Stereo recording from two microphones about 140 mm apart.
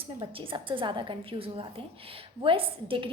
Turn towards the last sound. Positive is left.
turn(degrees=-40)  # may be behind; listen again after turning